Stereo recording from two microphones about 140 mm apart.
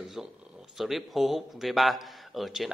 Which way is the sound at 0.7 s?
Centre (ahead or behind).